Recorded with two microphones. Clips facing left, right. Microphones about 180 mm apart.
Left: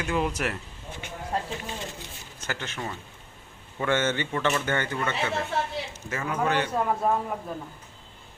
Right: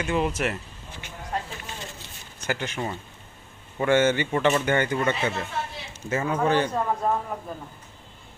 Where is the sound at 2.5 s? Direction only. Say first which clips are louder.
Right 5 dB; 15° right (ahead or behind).